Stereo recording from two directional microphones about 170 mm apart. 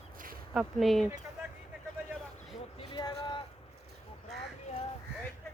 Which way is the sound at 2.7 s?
25° left (ahead or behind).